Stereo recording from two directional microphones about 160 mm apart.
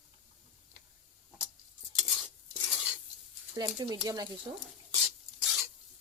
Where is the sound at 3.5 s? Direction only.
25° right (ahead or behind).